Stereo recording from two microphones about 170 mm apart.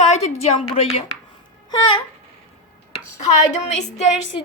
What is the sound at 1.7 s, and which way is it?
Speech, 30° left (ahead or behind).